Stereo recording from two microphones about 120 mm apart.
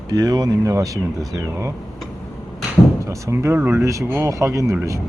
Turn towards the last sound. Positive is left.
turn(degrees=-25)  # may be behind; listen again after turning